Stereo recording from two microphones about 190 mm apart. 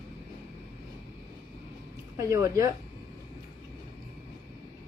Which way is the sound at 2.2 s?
15° right (ahead or behind).